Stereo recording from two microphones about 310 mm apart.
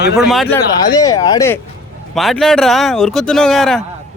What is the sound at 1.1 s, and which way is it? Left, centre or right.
Speech, centre.